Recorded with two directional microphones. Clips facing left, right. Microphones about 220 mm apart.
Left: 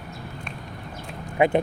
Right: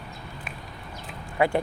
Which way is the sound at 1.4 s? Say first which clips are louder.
Left 3 dB; 20° left (ahead or behind).